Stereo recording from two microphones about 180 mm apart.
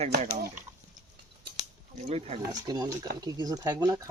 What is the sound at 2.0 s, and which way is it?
Speech, 35° right (ahead or behind).